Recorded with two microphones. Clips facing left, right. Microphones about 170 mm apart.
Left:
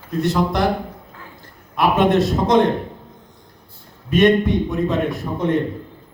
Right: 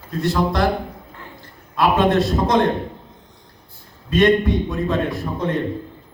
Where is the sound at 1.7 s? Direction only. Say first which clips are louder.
Left 1 dB; 20° left (ahead or behind).